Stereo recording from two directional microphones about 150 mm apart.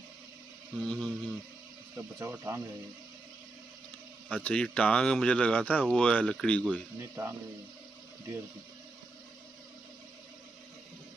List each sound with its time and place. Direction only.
0.7 s a sound: 5° left (ahead or behind)
2.0 s speech: 20° right (ahead or behind)
4.3 s speech: 10° left (ahead or behind)
7.0 s speech: 20° right (ahead or behind)